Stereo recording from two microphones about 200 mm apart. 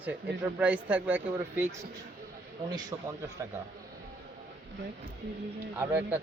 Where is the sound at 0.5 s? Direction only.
5° right (ahead or behind).